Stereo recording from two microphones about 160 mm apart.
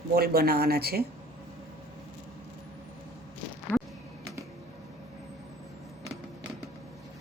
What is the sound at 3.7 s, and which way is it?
Music, 15° left (ahead or behind).